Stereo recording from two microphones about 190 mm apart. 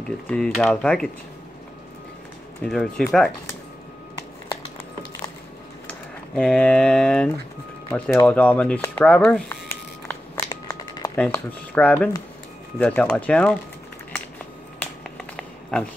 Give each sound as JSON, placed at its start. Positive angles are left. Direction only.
{"t": 0.3, "sound": "speech", "side_deg": 5}
{"t": 2.6, "sound": "speech", "side_deg": 5}
{"t": 5.9, "sound": "speech", "side_deg": 5}
{"t": 8.3, "sound": "speech", "side_deg": 5}
{"t": 10.3, "sound": "a sound", "side_deg": 20}
{"t": 11.1, "sound": "speech", "side_deg": 10}
{"t": 14.8, "sound": "a sound", "side_deg": 5}